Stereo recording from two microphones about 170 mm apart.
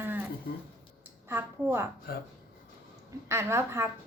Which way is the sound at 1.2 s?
15° right (ahead or behind).